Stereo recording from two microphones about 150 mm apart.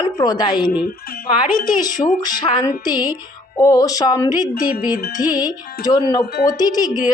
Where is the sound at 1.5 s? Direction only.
65° left (ahead or behind).